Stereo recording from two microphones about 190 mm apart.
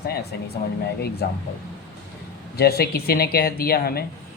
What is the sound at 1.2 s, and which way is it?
Speech, 60° left (ahead or behind).